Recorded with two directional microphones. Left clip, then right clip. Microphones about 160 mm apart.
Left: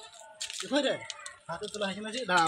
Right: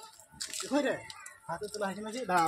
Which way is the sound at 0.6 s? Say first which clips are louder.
Left 2 dB; 15° left (ahead or behind).